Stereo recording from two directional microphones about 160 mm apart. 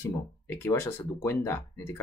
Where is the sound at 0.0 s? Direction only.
15° left (ahead or behind).